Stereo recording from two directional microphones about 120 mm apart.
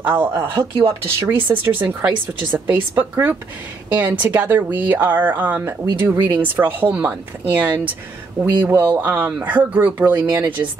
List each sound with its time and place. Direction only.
0.0 s speech: 15° right (ahead or behind)
0.4 s speech: 45° right (ahead or behind)
1.0 s speech: 15° right (ahead or behind)